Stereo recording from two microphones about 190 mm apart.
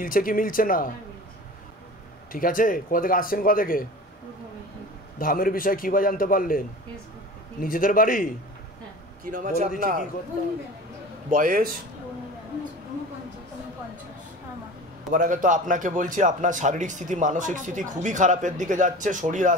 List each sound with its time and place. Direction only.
0.0 s speech: 45° left (ahead or behind)
2.3 s speech: 45° left (ahead or behind)
5.2 s speech: 50° left (ahead or behind)
7.6 s speech: 45° left (ahead or behind)
9.2 s a man's voice: 45° right (ahead or behind)
11.2 s a man's voice: 45° right (ahead or behind)
15.0 s a man's voice: 45° right (ahead or behind)